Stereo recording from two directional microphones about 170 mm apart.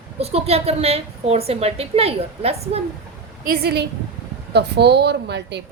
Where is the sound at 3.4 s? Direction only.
65° right (ahead or behind).